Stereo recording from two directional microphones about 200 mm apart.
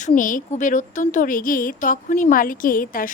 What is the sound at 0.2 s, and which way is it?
A woman's voice, 40° left (ahead or behind).